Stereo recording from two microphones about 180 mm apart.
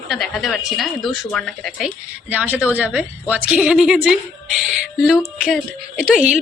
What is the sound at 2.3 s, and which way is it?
A woman's voice, 10° right (ahead or behind).